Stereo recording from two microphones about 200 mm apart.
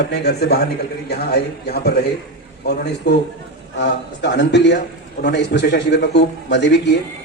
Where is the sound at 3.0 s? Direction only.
55° left (ahead or behind).